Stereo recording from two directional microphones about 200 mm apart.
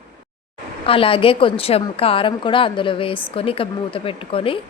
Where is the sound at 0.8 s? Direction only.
25° left (ahead or behind).